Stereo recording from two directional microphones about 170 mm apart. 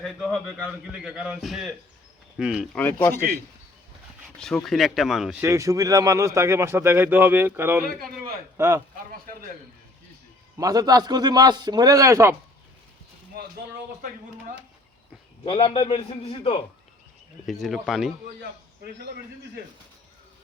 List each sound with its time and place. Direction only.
0.0 s a man's voice: centre (ahead or behind)
2.7 s speech: 10° left (ahead or behind)
4.4 s a man's voice: 5° left (ahead or behind)
5.4 s speech: 15° right (ahead or behind)
10.6 s a man's voice: 20° right (ahead or behind)
15.6 s a man's voice: 30° left (ahead or behind)
17.4 s a man's voice: centre (ahead or behind)